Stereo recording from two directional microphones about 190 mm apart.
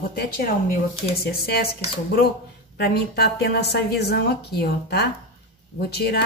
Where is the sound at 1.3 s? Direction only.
55° left (ahead or behind).